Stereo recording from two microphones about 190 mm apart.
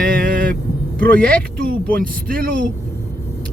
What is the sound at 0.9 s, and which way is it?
Speech, 50° right (ahead or behind).